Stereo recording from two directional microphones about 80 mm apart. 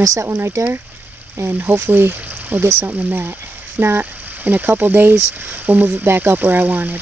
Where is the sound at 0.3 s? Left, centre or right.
Right.